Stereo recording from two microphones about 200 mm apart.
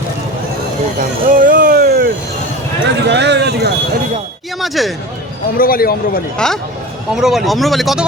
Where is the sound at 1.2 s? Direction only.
45° right (ahead or behind).